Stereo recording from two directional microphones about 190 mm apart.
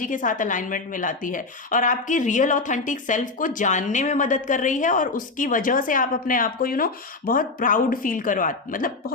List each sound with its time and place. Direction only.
0.0 s a woman's voice: 45° left (ahead or behind)